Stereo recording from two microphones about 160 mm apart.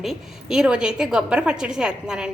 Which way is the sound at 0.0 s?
Centre (ahead or behind).